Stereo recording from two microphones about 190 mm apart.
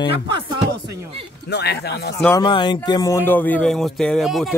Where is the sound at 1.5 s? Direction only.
60° left (ahead or behind).